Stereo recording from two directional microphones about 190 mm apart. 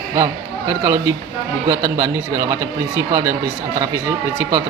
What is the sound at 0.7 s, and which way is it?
Speech, 15° right (ahead or behind).